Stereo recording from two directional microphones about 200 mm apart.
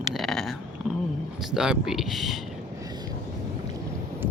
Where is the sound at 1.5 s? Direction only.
5° right (ahead or behind).